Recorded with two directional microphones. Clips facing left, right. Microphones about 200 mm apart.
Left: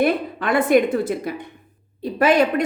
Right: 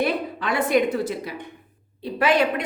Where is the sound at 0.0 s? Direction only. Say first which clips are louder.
Left 4 dB; 50° left (ahead or behind).